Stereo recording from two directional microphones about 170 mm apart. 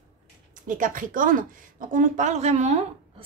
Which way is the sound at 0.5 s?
50° right (ahead or behind).